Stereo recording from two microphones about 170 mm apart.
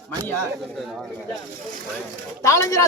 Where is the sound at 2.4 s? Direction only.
20° left (ahead or behind).